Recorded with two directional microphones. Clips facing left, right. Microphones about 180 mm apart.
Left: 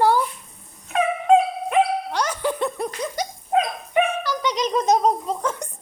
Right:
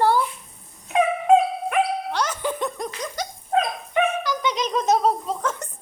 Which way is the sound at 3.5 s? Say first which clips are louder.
Left 1 dB; 10° left (ahead or behind).